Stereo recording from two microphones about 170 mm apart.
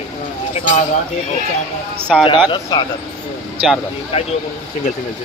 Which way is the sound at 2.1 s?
Centre (ahead or behind).